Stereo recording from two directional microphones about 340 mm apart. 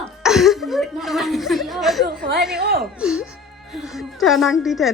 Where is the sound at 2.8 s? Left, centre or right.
Centre.